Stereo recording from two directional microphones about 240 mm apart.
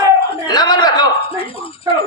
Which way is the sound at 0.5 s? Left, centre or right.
Centre.